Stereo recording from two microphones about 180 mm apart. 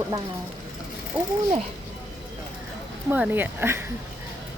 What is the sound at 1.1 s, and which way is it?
Speech, 10° right (ahead or behind).